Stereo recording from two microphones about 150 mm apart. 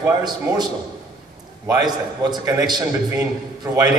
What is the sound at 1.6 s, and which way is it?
A man's voice, 25° right (ahead or behind).